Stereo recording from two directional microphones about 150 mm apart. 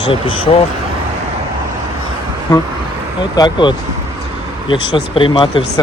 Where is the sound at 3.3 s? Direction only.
30° left (ahead or behind).